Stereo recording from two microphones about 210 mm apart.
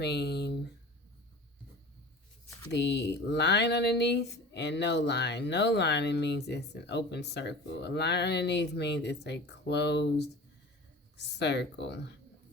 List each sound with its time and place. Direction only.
0.0 s speech: 50° left (ahead or behind)
2.7 s speech: 55° left (ahead or behind)